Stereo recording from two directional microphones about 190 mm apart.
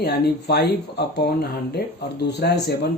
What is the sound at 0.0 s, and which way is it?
Speech, 60° left (ahead or behind).